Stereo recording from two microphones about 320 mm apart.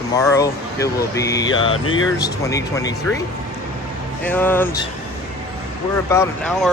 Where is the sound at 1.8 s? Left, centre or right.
Left.